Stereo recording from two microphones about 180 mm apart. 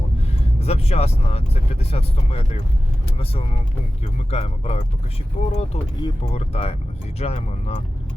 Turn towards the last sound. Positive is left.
turn(degrees=35)  # may be behind; listen again after turning